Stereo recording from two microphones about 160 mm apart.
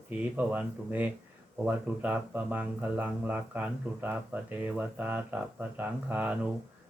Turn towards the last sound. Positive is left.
turn(degrees=-10)  # may be behind; listen again after turning